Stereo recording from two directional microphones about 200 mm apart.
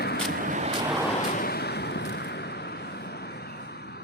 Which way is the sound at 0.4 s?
35° right (ahead or behind).